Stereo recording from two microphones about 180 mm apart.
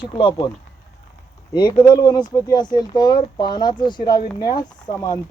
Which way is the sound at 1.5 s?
25° left (ahead or behind).